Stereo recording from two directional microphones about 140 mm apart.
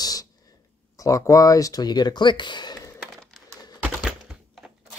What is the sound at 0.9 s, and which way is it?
Speech, 25° left (ahead or behind).